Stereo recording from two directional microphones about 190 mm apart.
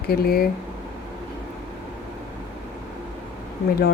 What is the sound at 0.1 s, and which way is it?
Speech, 50° left (ahead or behind).